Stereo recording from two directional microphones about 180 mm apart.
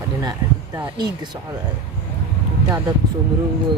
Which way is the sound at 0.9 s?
25° right (ahead or behind).